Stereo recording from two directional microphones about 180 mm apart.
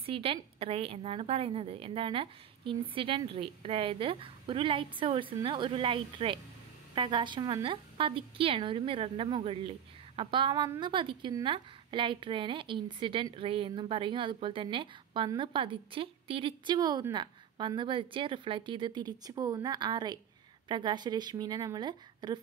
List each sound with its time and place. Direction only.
0.0 s a woman's voice: 30° right (ahead or behind)